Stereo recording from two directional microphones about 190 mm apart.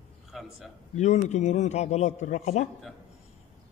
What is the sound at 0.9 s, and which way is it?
A man's voice, 35° left (ahead or behind).